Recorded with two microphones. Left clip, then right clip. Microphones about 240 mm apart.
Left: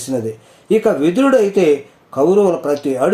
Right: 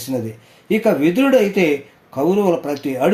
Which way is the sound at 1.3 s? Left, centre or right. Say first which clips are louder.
Left 3 dB; right.